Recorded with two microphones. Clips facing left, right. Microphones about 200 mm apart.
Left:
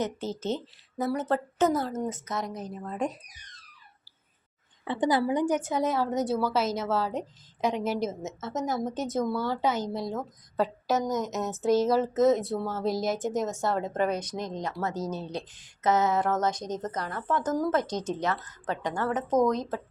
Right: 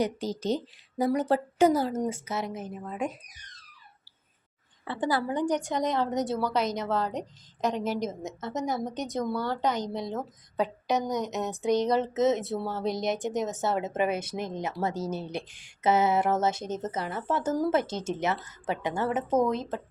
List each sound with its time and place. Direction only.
0.0 s speech: 15° right (ahead or behind)
4.9 s a woman's voice: 20° left (ahead or behind); by 17.8 s 10° right (ahead or behind)
17.8 s speech: 25° right (ahead or behind)
18.2 s speech: 10° right (ahead or behind)